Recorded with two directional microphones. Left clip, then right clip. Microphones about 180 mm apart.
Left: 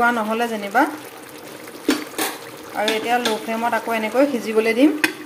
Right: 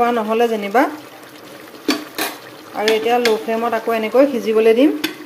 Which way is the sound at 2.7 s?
10° right (ahead or behind).